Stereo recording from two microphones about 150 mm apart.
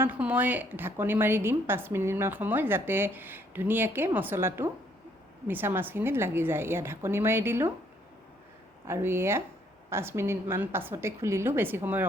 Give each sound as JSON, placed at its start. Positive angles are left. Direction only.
{"t": 0.0, "sound": "a woman's voice", "side_deg": -10}
{"t": 8.9, "sound": "a woman's voice", "side_deg": -15}